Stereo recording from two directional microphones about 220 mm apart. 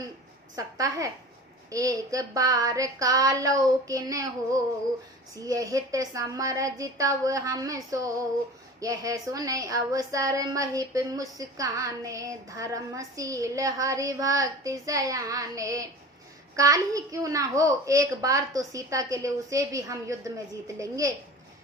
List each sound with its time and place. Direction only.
0.5 s a woman's voice: 15° right (ahead or behind)
5.5 s a woman's voice: 15° right (ahead or behind)